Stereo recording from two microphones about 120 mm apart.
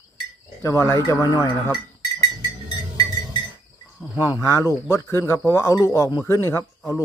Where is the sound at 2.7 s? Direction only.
35° left (ahead or behind).